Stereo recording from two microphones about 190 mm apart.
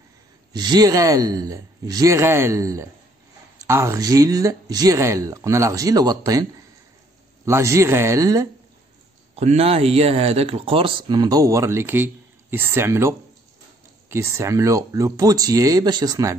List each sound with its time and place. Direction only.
0.5 s speech: 20° right (ahead or behind)
7.4 s speech: 15° right (ahead or behind)
9.3 s speech: 35° right (ahead or behind); by 13.1 s 15° right (ahead or behind)
14.1 s speech: 15° right (ahead or behind)